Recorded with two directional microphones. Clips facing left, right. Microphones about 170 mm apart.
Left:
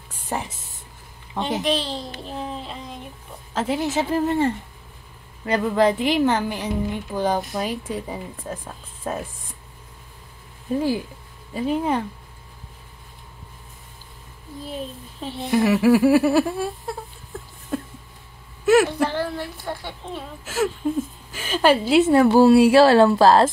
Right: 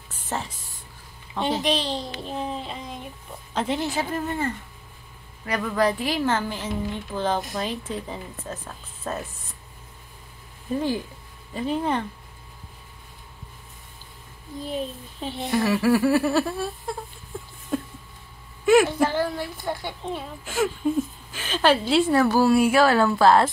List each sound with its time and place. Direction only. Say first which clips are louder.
0.1 s a sound: left 2 dB; 15° left (ahead or behind)
1.6 s a woman's voice: left 1 dB; centre (ahead or behind)
2.2 s a sound: right 1 dB; centre (ahead or behind)
3.5 s a woman's voice: left 2 dB; 5° left (ahead or behind)
3.9 s a woman's voice: left 6 dB; 25° left (ahead or behind)
10.8 s a woman's voice: left 3 dB; 10° left (ahead or behind)
15.1 s speech: even; centre (ahead or behind)
15.5 s a woman's voice: left 4 dB; 15° left (ahead or behind)
17.7 s a sound: even; 5° left (ahead or behind)
18.7 s a woman's voice: left 1 dB; centre (ahead or behind); by 23.5 s 35° left (ahead or behind)